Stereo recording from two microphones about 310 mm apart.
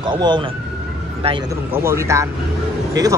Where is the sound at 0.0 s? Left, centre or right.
Centre.